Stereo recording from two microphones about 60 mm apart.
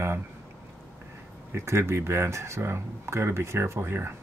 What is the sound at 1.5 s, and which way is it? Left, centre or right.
Speech, right.